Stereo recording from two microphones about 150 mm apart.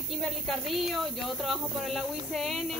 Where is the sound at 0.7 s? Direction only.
Centre (ahead or behind).